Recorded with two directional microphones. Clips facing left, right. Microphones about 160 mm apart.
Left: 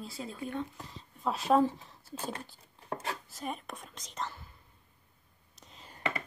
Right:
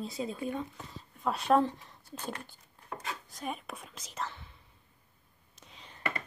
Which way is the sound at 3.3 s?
Centre (ahead or behind).